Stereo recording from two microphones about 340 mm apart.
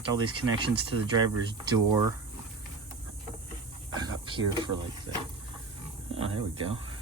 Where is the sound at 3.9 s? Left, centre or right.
Centre.